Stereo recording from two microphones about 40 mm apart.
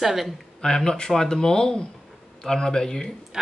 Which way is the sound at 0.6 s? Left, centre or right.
Centre.